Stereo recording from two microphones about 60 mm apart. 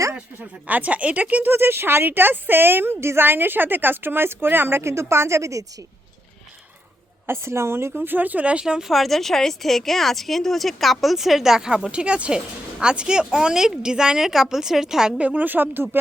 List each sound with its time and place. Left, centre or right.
0.1 s speech: right
4.8 s a woman's voice: right
7.3 s speech: right
8.6 s speech: centre
15.2 s speech: right